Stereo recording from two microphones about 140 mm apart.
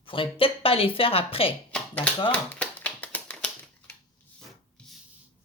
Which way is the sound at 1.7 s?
10° left (ahead or behind).